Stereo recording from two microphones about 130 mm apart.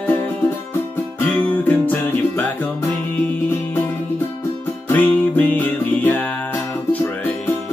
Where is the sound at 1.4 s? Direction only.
15° left (ahead or behind).